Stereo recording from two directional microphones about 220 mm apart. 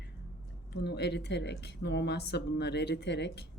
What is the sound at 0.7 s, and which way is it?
A woman's voice, 50° left (ahead or behind).